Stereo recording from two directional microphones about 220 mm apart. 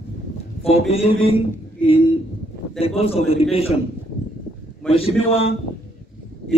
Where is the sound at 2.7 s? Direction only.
25° left (ahead or behind).